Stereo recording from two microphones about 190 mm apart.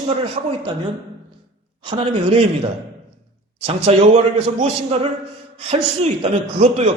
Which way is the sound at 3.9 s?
30° right (ahead or behind).